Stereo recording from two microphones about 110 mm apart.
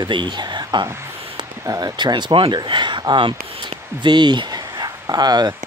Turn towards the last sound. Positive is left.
turn(degrees=-40)  # may be behind; listen again after turning